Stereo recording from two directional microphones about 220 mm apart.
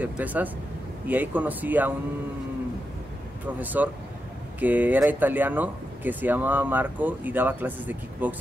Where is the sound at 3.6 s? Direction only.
10° right (ahead or behind).